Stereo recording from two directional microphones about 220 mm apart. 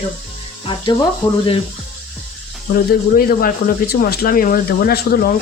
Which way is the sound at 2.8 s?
40° left (ahead or behind).